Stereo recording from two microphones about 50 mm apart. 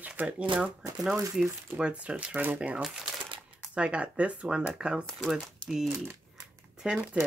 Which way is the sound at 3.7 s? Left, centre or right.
Right.